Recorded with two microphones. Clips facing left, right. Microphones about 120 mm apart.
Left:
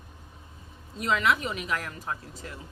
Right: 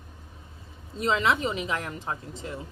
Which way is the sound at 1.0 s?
25° right (ahead or behind).